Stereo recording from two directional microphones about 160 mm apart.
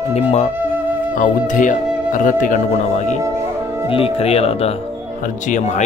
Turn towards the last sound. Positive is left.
turn(degrees=50)  # may be behind; listen again after turning